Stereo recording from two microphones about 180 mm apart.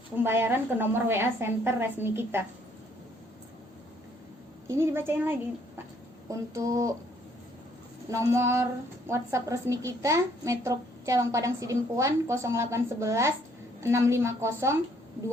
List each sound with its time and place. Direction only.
0.2 s a child's voice: 10° right (ahead or behind)
4.7 s a child's voice: 15° right (ahead or behind)
8.1 s a child's voice: 15° right (ahead or behind)